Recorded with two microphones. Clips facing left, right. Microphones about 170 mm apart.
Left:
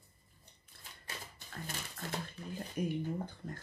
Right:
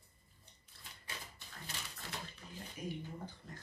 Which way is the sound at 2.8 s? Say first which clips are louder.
Left 8 dB; 55° left (ahead or behind).